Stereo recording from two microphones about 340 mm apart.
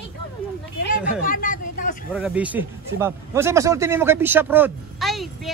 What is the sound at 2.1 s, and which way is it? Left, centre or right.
A man's voice, centre.